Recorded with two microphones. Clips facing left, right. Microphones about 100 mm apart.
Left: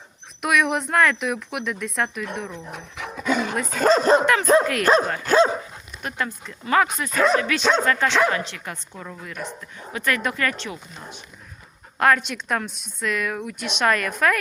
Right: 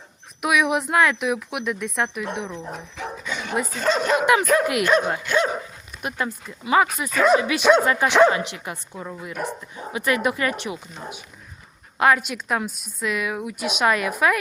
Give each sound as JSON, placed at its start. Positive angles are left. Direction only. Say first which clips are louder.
{"t": 0.4, "sound": "a woman's voice", "louder": "right 1 dB", "side_deg": -5}
{"t": 2.7, "sound": "dog", "louder": "right 1 dB", "side_deg": 70}
{"t": 3.2, "sound": "dog", "louder": "left 12 dB", "side_deg": 45}
{"t": 3.7, "sound": "speech", "louder": "left 6 dB", "side_deg": 40}
{"t": 6.0, "sound": "a woman's voice", "louder": "right 1 dB", "side_deg": -10}
{"t": 7.3, "sound": "a woman's voice", "louder": "right 3 dB", "side_deg": -10}